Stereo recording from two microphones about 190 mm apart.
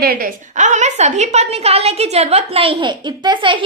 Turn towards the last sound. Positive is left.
turn(degrees=-25)  # may be behind; listen again after turning